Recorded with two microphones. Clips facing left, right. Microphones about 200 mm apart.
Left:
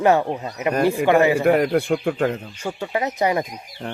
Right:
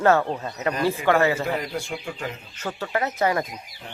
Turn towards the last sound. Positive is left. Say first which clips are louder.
# left 2 dB
turn(degrees=20)  # may be behind; listen again after turning